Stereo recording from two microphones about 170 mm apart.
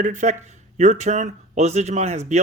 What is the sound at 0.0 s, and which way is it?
Speech, 45° right (ahead or behind).